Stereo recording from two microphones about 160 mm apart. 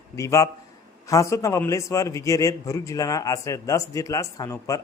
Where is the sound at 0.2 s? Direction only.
20° left (ahead or behind).